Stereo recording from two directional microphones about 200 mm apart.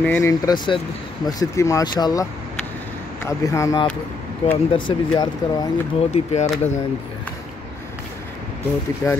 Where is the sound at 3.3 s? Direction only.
15° left (ahead or behind).